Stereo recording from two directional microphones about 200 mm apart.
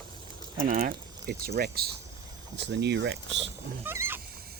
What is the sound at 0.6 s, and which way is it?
Speech, 40° right (ahead or behind).